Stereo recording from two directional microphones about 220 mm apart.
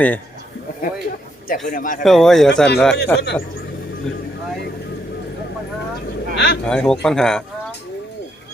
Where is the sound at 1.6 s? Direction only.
35° left (ahead or behind).